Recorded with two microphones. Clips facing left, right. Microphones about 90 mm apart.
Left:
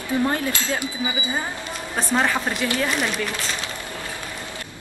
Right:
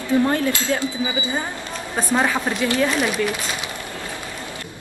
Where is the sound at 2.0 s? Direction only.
5° right (ahead or behind).